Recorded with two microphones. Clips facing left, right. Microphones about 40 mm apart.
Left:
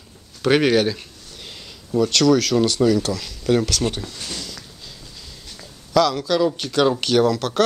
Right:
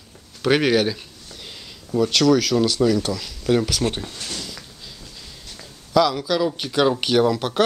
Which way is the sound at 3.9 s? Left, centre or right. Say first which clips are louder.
Even; right.